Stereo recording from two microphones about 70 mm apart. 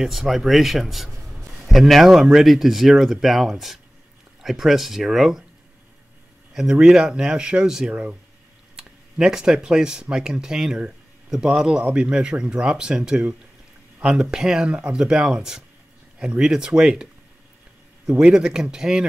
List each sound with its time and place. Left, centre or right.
0.0 s speech: centre
1.2 s a sound: centre
2.3 s speech: centre
6.5 s speech: centre